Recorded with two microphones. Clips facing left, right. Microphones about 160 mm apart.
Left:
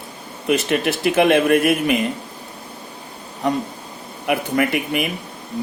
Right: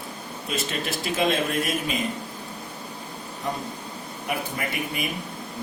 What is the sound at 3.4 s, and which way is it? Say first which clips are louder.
Speech: left 10 dB; 80° left.